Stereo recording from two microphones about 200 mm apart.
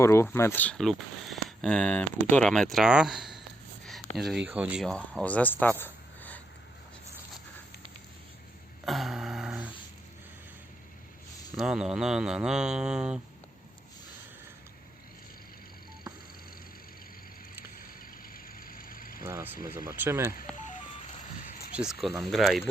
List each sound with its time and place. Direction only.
0.0 s speech: 15° left (ahead or behind)
8.8 s a sound: centre (ahead or behind)
11.5 s speech: 5° right (ahead or behind)
18.4 s vehicle: 45° left (ahead or behind)
19.2 s speech: 10° right (ahead or behind)
21.4 s a sound: 5° right (ahead or behind)
22.2 s speech: centre (ahead or behind)